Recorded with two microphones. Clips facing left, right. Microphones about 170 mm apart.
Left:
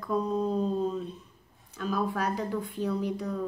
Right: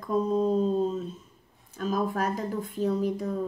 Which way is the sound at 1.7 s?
45° right (ahead or behind).